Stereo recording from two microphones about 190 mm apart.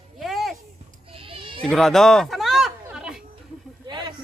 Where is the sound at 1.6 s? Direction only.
Centre (ahead or behind).